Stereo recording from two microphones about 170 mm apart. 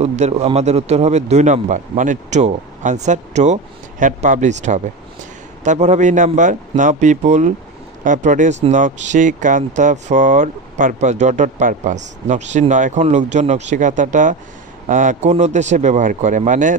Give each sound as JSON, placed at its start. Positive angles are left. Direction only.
{"t": 0.0, "sound": "speech", "side_deg": -40}